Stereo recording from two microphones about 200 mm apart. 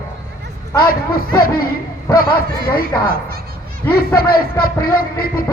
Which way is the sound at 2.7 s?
50° left (ahead or behind).